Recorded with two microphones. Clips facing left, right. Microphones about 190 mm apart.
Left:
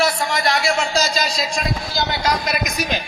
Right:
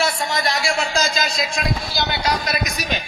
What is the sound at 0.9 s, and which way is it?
Speech, 50° right (ahead or behind).